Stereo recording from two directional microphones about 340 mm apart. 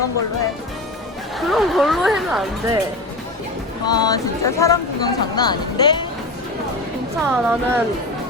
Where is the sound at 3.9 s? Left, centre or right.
Centre.